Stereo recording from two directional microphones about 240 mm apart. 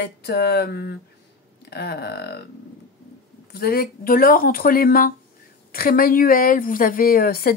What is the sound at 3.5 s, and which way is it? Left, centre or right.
A woman's voice, left.